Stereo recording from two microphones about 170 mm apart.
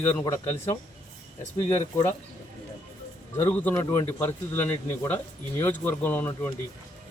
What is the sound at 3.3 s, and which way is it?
Speech, 10° left (ahead or behind).